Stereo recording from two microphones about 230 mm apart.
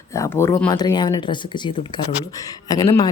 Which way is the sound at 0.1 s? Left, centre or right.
Centre.